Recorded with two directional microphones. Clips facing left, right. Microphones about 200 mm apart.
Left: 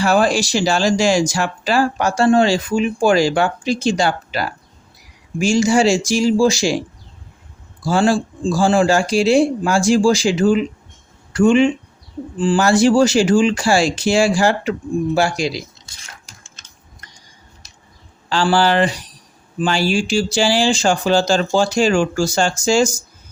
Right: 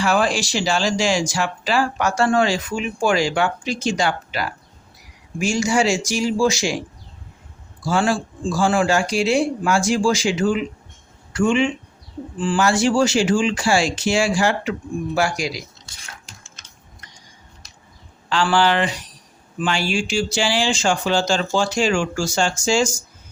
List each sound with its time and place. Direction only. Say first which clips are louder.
0.0 s speech: left 4 dB; 40° left (ahead or behind)
7.9 s speech: left 4 dB; 35° left (ahead or behind)
18.3 s speech: left 2 dB; 35° left (ahead or behind)